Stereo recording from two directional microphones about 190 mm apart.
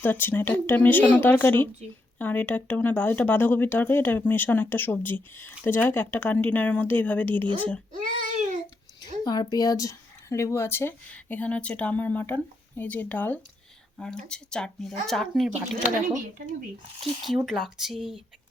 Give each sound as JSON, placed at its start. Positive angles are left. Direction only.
{"t": 0.0, "sound": "speech", "side_deg": 10}
{"t": 8.3, "sound": "babbling", "side_deg": -40}
{"t": 9.2, "sound": "speech", "side_deg": 20}
{"t": 16.4, "sound": "speech", "side_deg": -45}
{"t": 17.0, "sound": "speech", "side_deg": 0}